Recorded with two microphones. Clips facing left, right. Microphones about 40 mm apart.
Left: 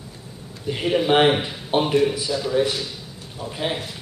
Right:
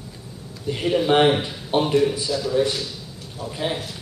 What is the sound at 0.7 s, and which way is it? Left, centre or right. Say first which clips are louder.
A man's voice: even; centre.